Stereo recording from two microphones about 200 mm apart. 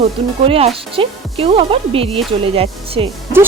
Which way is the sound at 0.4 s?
30° right (ahead or behind).